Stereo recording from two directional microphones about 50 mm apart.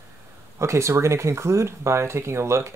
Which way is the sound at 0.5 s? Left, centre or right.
Right.